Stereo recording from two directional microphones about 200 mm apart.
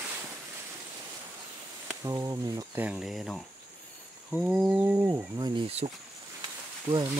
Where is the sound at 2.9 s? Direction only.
Centre (ahead or behind).